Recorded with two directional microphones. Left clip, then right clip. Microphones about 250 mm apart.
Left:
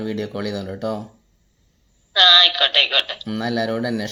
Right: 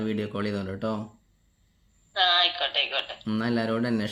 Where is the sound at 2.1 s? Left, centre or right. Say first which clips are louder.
Left 10 dB; left.